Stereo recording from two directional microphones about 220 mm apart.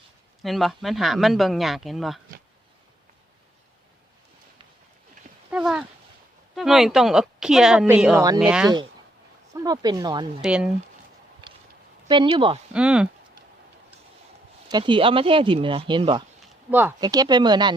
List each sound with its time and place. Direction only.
0.4 s speech: centre (ahead or behind)
5.5 s a sound: 5° right (ahead or behind)
6.6 s speech: centre (ahead or behind)
9.6 s speech: 20° right (ahead or behind)
10.4 s speech: 5° right (ahead or behind)
11.4 s a sound: 20° right (ahead or behind)
12.0 s speech: 20° right (ahead or behind)
12.7 s speech: 5° right (ahead or behind)
14.7 s speech: 20° right (ahead or behind)